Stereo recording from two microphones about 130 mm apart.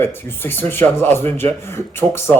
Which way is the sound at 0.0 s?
15° left (ahead or behind).